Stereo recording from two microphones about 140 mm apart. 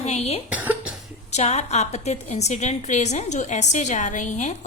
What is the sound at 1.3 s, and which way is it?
A woman's voice, 55° left (ahead or behind).